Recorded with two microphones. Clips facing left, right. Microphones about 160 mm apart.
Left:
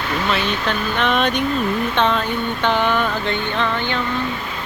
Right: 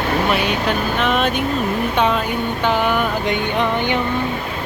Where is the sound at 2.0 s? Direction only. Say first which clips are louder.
Right 2 dB; 10° right (ahead or behind).